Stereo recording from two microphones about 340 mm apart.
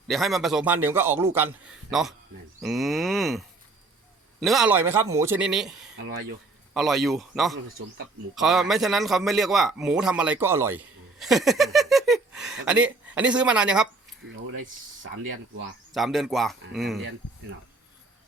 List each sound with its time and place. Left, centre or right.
0.1 s a man's voice: centre
14.3 s a sound: right
15.2 s speech: right
15.9 s a man's voice: centre